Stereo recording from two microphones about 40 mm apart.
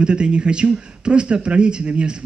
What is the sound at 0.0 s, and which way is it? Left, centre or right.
Speech, right.